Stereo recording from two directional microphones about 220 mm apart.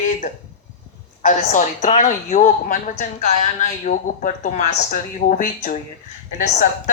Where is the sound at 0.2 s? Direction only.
35° left (ahead or behind).